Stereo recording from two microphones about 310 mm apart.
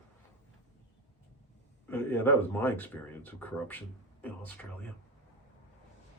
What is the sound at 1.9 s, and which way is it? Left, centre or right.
Speech, centre.